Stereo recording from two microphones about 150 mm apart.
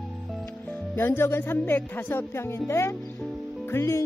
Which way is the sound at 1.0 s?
15° left (ahead or behind).